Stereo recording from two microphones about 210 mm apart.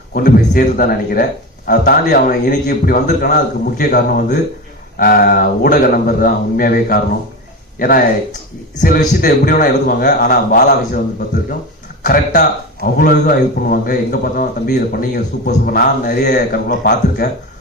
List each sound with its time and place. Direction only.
0.1 s a man's voice: 45° left (ahead or behind)
12.0 s a man's voice: 45° left (ahead or behind)